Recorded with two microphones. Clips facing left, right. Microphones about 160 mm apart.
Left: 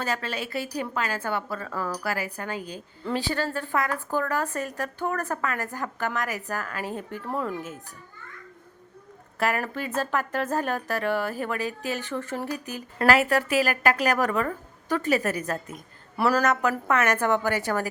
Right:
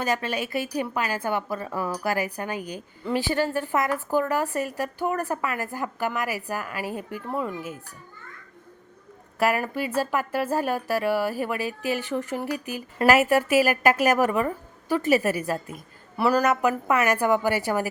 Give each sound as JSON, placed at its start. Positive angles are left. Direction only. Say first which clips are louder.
{"t": 0.0, "sound": "speech", "louder": "right 3 dB", "side_deg": -15}
{"t": 9.4, "sound": "speech", "louder": "right 3 dB", "side_deg": -10}
{"t": 15.7, "sound": "a woman's voice", "louder": "right 1 dB", "side_deg": 0}
{"t": 16.4, "sound": "speech", "louder": "right 2 dB", "side_deg": -15}